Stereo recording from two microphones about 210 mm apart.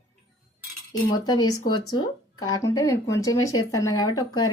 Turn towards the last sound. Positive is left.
turn(degrees=20)  # may be behind; listen again after turning